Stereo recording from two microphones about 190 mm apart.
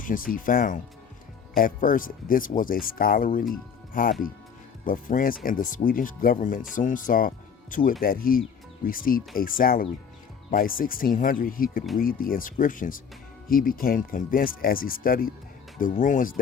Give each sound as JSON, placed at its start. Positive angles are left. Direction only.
{"t": 0.0, "sound": "speech", "side_deg": 45}